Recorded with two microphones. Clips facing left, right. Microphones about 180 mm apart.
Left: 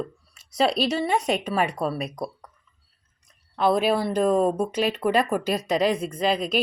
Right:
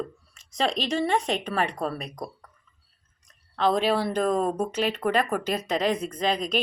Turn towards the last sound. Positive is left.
turn(degrees=5)  # may be behind; listen again after turning